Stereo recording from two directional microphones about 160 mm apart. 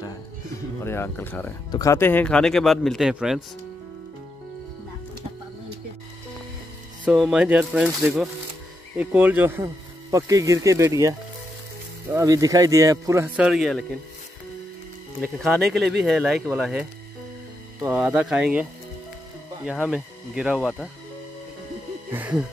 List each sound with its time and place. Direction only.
0.8 s speech: 15° left (ahead or behind); by 3.3 s 5° right (ahead or behind)
7.1 s speech: 5° right (ahead or behind); by 13.3 s 20° right (ahead or behind)
13.4 s speech: centre (ahead or behind)
15.3 s speech: centre (ahead or behind)
17.8 s speech: 10° right (ahead or behind)
22.1 s speech: 10° right (ahead or behind)